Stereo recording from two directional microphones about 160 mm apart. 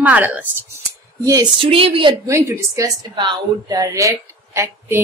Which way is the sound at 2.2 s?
20° right (ahead or behind).